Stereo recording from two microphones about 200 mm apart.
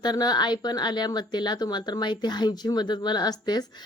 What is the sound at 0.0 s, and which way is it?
Speech, 20° left (ahead or behind).